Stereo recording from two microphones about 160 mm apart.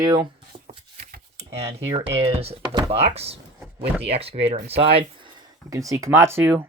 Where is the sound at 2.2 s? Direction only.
40° right (ahead or behind).